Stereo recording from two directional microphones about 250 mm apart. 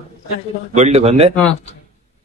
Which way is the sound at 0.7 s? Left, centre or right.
Right.